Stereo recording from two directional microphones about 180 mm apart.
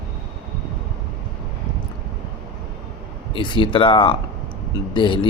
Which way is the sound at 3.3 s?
25° left (ahead or behind).